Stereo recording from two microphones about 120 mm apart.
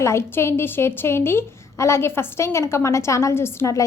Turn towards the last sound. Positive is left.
turn(degrees=25)  # may be behind; listen again after turning